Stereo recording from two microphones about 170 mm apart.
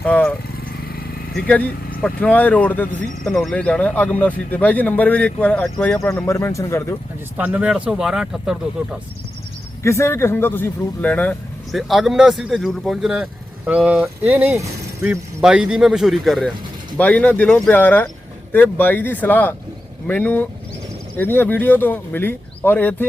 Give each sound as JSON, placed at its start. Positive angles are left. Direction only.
{"t": 0.0, "sound": "speech", "side_deg": 5}
{"t": 0.6, "sound": "vehicle", "side_deg": 60}
{"t": 1.5, "sound": "speech", "side_deg": 10}
{"t": 7.3, "sound": "speech", "side_deg": -10}
{"t": 9.8, "sound": "speech", "side_deg": 15}